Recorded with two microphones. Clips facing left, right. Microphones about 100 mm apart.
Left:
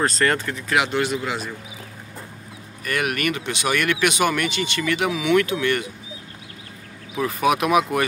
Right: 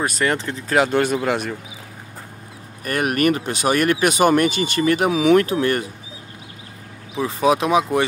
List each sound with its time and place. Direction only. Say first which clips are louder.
0.0 s speech: even; 15° right (ahead or behind)
0.5 s speech: right 4 dB; 35° right (ahead or behind); by 1.5 s 55° right (ahead or behind)
2.8 s speech: right 5 dB; 40° right (ahead or behind)
7.2 s speech: right 2 dB; 25° right (ahead or behind)